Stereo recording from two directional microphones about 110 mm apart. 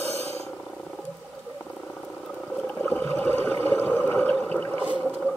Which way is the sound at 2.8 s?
15° left (ahead or behind).